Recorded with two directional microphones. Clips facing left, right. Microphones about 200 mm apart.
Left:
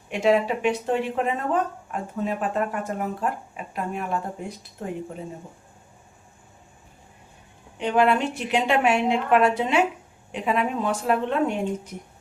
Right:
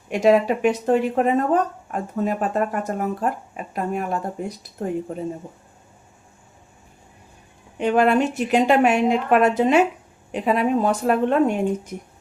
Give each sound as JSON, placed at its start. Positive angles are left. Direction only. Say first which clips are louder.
{"t": 0.1, "sound": "speech", "louder": "right 4 dB", "side_deg": -45}
{"t": 7.8, "sound": "speech", "louder": "right 3 dB", "side_deg": -45}